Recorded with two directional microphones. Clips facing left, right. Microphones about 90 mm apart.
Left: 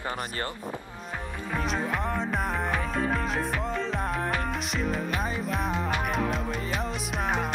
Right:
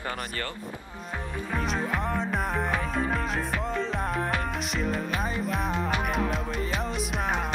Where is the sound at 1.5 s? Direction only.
Centre (ahead or behind).